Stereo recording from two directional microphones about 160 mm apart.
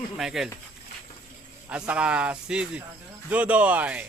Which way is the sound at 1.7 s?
5° right (ahead or behind).